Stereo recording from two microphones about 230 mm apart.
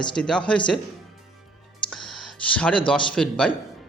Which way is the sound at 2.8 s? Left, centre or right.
Centre.